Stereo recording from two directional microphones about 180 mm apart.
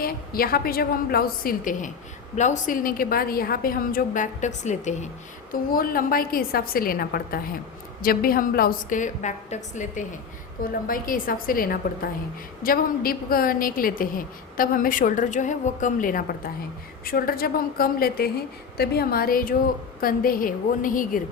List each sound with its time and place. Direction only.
0.0 s a woman's voice: 55° left (ahead or behind); by 5.0 s 40° left (ahead or behind)
5.7 s a woman's voice: 55° left (ahead or behind)